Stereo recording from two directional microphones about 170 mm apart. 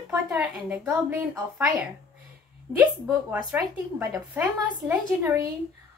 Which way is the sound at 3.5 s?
10° right (ahead or behind).